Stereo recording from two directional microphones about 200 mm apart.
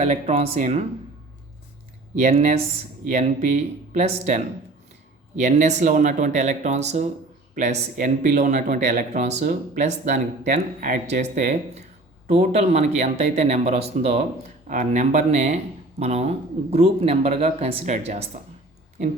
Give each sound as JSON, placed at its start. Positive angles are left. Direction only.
{"t": 0.0, "sound": "speech", "side_deg": -35}
{"t": 2.1, "sound": "speech", "side_deg": -40}
{"t": 5.4, "sound": "speech", "side_deg": -35}